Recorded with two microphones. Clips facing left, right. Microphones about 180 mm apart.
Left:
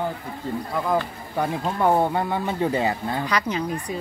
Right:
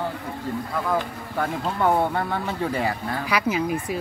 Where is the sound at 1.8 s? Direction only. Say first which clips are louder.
Left 1 dB; 15° left (ahead or behind).